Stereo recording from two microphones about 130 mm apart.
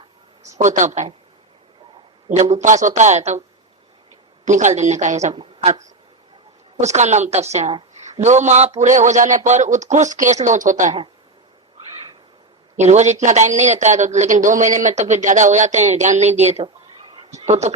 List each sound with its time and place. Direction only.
0.5 s a man's voice: 70° right (ahead or behind)
2.3 s a man's voice: 55° right (ahead or behind)
4.4 s a man's voice: 70° right (ahead or behind)
6.7 s a woman's voice: 60° right (ahead or behind); by 10.9 s 80° right
12.7 s a man's voice: 60° right (ahead or behind)